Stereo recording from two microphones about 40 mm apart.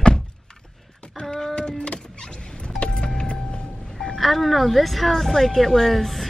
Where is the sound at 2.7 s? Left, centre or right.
Left.